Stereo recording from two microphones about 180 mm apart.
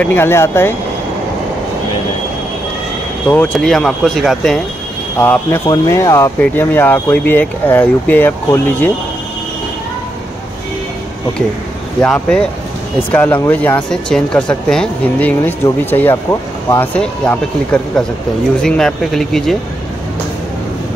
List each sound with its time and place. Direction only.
0.0 s speech: 10° left (ahead or behind)
3.3 s speech: 10° left (ahead or behind)
5.2 s speech: 10° left (ahead or behind)
12.0 s speech: 5° left (ahead or behind)
17.0 s speech: 5° left (ahead or behind)
18.6 s speech: 5° left (ahead or behind)